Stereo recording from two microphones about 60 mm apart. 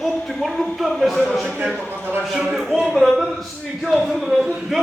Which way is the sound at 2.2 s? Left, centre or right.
Centre.